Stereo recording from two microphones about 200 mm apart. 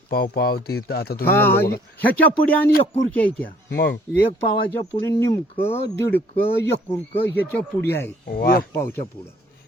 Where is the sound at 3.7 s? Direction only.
55° left (ahead or behind).